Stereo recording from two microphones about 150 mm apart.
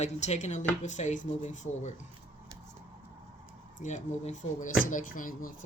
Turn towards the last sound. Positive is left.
turn(degrees=65)  # may be behind; listen again after turning